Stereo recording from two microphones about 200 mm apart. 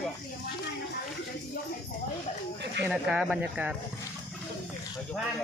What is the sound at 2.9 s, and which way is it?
Speech, 5° right (ahead or behind).